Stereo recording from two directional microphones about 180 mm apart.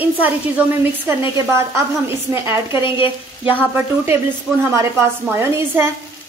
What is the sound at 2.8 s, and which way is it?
Frying, 30° left (ahead or behind).